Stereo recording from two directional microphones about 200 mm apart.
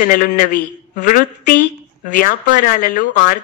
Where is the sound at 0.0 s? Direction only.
40° left (ahead or behind).